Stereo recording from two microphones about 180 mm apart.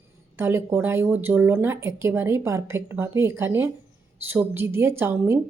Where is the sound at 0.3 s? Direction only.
15° right (ahead or behind).